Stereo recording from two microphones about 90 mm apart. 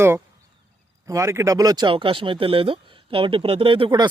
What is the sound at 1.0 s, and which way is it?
Speech, 35° right (ahead or behind).